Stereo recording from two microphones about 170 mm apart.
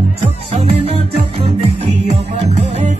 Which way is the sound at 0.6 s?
35° right (ahead or behind).